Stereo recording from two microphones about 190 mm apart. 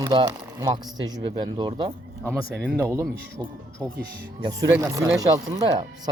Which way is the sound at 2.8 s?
15° right (ahead or behind).